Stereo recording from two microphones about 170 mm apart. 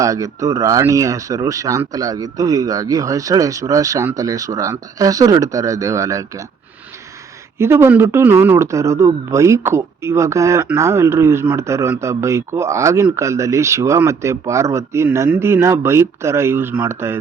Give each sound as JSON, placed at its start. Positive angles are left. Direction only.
{"t": 0.0, "sound": "speech", "side_deg": -20}
{"t": 7.6, "sound": "speech", "side_deg": -15}